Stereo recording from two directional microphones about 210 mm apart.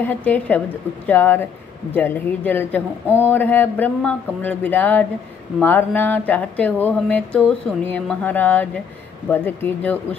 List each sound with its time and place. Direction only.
0.0 s speech: 10° left (ahead or behind)